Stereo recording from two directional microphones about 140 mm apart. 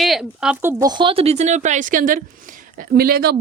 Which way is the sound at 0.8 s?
30° right (ahead or behind).